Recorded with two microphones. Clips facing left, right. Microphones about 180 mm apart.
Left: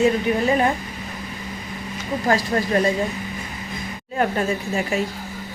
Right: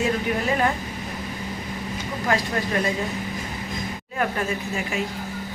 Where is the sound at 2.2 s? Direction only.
35° left (ahead or behind).